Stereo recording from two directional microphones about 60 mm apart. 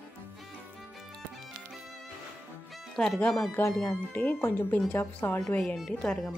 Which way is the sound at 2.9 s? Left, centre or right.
Centre.